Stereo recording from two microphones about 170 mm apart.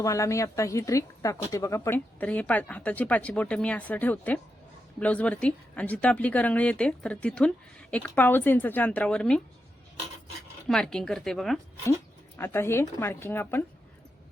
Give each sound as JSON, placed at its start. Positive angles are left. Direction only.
{"t": 0.0, "sound": "speech", "side_deg": 20}
{"t": 10.7, "sound": "speech", "side_deg": 5}
{"t": 12.4, "sound": "speech", "side_deg": 15}